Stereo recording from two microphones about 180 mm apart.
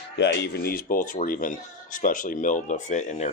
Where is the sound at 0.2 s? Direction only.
75° left (ahead or behind).